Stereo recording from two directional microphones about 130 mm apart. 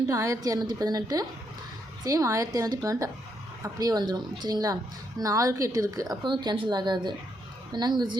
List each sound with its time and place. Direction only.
0.1 s a woman's voice: 25° right (ahead or behind)